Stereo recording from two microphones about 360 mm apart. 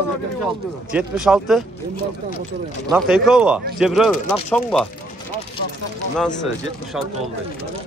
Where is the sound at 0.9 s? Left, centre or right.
Centre.